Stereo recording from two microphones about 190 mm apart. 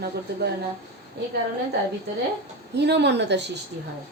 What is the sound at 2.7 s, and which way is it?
Speech, 60° right (ahead or behind).